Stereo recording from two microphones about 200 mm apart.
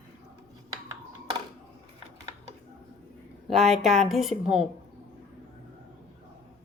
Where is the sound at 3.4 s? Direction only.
Centre (ahead or behind).